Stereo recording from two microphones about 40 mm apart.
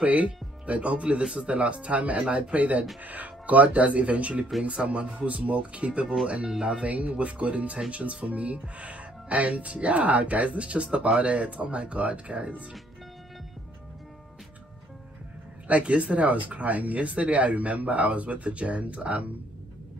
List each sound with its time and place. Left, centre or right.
0.0 s speech: right
6.9 s speech: right
15.7 s speech: right